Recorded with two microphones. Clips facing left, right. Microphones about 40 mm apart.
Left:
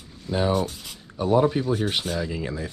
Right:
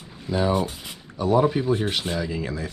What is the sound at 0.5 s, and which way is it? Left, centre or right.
Speech, right.